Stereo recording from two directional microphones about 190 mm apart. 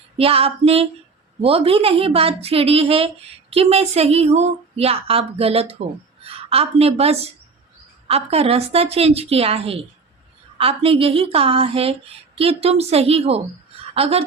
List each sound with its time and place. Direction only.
0.2 s a woman's voice: 30° right (ahead or behind)